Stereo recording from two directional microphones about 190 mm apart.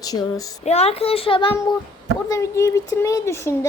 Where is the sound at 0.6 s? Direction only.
35° left (ahead or behind).